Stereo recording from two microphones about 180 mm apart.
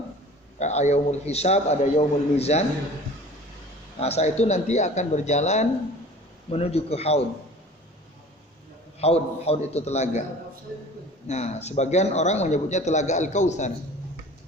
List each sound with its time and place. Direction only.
0.6 s a man's voice: 40° left (ahead or behind)
4.0 s a man's voice: 35° left (ahead or behind)
9.0 s a man's voice: 35° left (ahead or behind)
11.3 s a man's voice: 40° left (ahead or behind)